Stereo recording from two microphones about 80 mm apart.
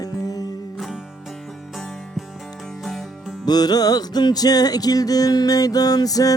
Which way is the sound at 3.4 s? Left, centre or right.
Left.